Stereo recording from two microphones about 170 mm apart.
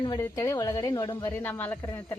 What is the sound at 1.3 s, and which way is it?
Speech, 10° left (ahead or behind).